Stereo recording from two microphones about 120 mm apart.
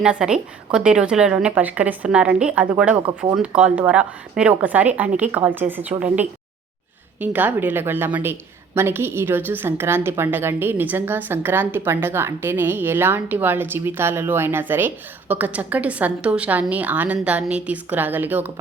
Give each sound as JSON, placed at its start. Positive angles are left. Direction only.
{"t": 0.0, "sound": "a woman's voice", "side_deg": -5}
{"t": 7.2, "sound": "a woman's voice", "side_deg": -15}